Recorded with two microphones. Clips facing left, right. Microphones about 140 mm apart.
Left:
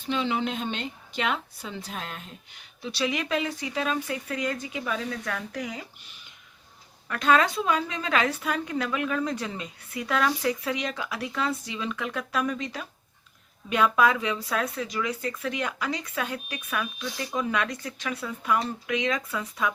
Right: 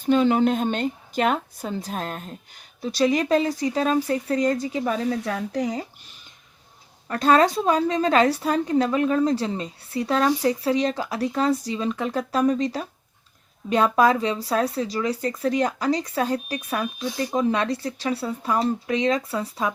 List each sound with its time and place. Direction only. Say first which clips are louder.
0.0 s a woman's voice: right 9 dB; 45° right (ahead or behind)
7.1 s a woman's voice: right 5 dB; 35° right (ahead or behind)